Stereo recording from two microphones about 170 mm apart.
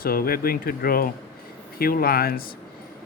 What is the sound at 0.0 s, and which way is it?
Speech, 60° left (ahead or behind).